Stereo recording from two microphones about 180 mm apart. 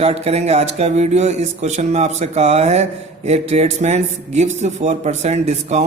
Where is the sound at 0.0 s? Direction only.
35° right (ahead or behind).